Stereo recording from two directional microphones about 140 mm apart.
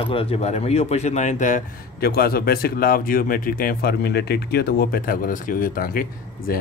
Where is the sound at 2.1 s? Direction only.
90° left.